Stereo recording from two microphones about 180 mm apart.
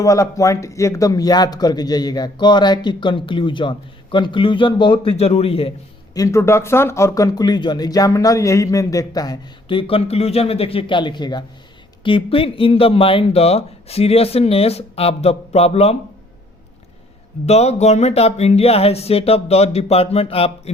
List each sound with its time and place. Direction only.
0.0 s speech: 15° left (ahead or behind)
6.1 s speech: 15° left (ahead or behind); by 16.0 s 35° left (ahead or behind)
17.4 s speech: 35° left (ahead or behind)